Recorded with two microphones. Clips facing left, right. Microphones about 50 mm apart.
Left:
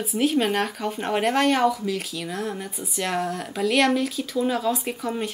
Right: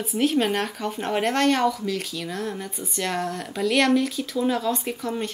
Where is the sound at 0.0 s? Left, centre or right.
Centre.